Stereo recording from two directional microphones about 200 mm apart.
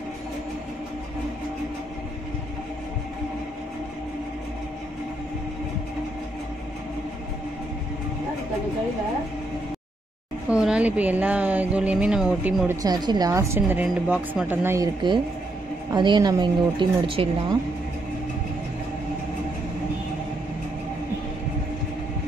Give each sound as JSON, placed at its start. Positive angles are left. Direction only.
{"t": 10.5, "sound": "a woman's voice", "side_deg": -5}
{"t": 12.8, "sound": "a woman's voice", "side_deg": -20}